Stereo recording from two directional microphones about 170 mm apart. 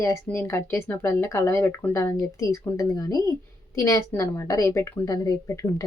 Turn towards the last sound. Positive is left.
turn(degrees=20)  # may be behind; listen again after turning